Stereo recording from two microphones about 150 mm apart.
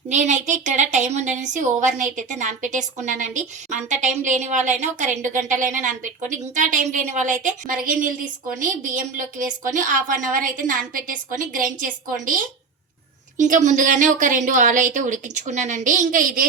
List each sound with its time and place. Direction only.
0.1 s a woman's voice: 55° right (ahead or behind)